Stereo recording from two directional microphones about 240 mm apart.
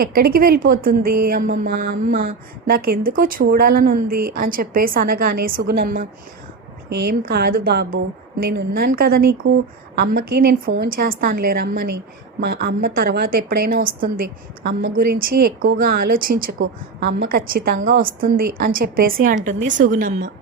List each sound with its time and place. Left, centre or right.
0.0 s a woman's voice: right